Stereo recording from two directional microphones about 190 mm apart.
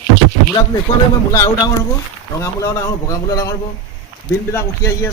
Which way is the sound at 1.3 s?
15° left (ahead or behind).